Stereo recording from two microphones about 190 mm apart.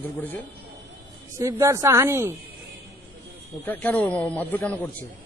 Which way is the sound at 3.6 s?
10° left (ahead or behind).